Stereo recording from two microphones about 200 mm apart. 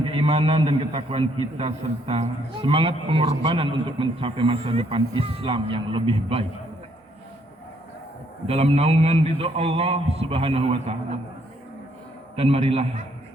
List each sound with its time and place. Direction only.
0.0 s a man's voice: 25° right (ahead or behind)
8.4 s a man's voice: 30° right (ahead or behind)
12.4 s a man's voice: 30° right (ahead or behind)